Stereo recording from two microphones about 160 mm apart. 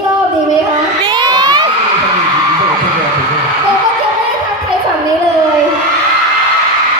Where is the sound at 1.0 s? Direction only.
30° right (ahead or behind).